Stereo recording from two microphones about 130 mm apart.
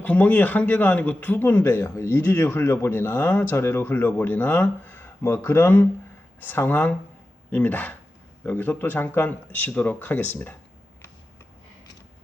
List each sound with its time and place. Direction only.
0.0 s speech: 10° left (ahead or behind)